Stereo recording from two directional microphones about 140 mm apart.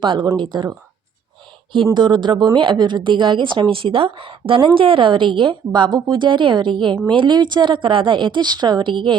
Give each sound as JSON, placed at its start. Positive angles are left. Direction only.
{"t": 0.0, "sound": "speech", "side_deg": -35}
{"t": 1.7, "sound": "speech", "side_deg": -35}